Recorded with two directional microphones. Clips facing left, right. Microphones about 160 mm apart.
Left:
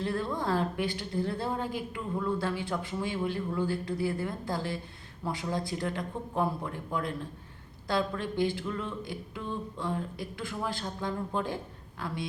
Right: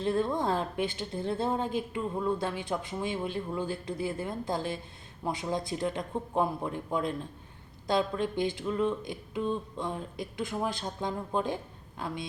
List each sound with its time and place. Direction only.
0.0 s a woman's voice: 20° right (ahead or behind)